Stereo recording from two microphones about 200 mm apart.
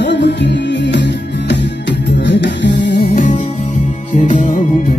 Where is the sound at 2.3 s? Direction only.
65° left (ahead or behind).